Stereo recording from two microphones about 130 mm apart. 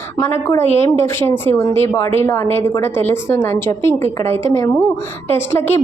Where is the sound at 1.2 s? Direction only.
15° left (ahead or behind).